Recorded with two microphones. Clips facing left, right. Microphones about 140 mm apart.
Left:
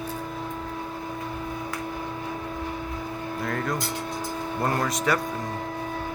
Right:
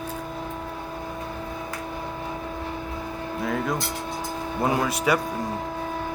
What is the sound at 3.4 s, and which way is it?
Speech, centre (ahead or behind).